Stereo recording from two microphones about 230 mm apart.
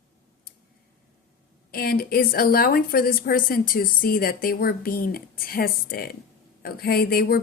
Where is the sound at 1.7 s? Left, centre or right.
Left.